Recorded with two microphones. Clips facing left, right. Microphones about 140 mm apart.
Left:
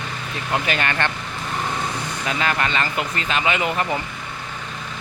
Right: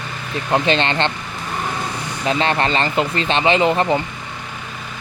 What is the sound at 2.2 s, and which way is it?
Speech, 30° right (ahead or behind).